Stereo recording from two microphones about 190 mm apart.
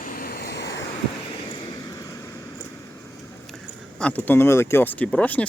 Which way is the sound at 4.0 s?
5° left (ahead or behind).